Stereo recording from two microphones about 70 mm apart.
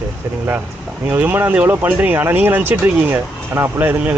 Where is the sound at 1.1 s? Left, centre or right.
Right.